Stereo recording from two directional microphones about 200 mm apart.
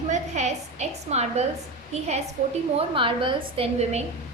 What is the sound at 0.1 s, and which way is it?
A woman's voice, 35° right (ahead or behind).